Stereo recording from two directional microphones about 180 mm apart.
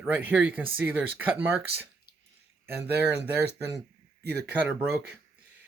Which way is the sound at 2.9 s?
70° right (ahead or behind).